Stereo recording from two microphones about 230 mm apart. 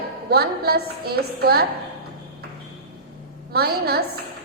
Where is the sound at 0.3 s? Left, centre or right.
Right.